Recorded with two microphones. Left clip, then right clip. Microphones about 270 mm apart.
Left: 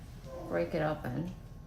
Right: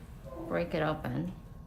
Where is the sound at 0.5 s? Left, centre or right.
Centre.